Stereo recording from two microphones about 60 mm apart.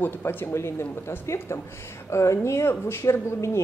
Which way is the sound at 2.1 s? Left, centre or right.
Left.